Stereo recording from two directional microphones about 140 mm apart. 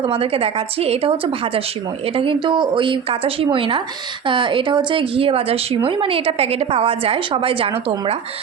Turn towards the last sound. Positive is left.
turn(degrees=-40)  # may be behind; listen again after turning